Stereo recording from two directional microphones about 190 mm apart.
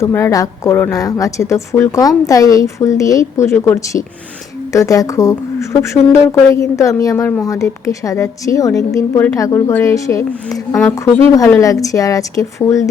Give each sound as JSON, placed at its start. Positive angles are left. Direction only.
{"t": 0.0, "sound": "speech", "side_deg": 15}